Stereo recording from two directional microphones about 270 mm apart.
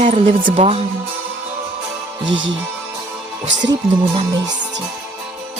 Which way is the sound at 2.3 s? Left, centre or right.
Right.